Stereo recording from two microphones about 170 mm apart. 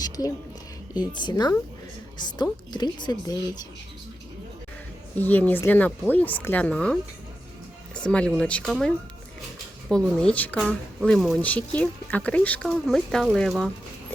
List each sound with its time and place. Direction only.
0.0 s a sound: 20° left (ahead or behind)
1.1 s speech: 25° left (ahead or behind)
5.1 s speech: 10° left (ahead or behind)
9.9 s speech: 5° left (ahead or behind)